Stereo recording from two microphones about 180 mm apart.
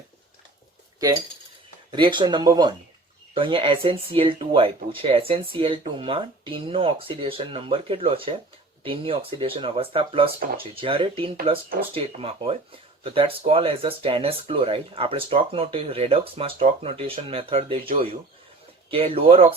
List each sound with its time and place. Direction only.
1.9 s speech: 25° right (ahead or behind)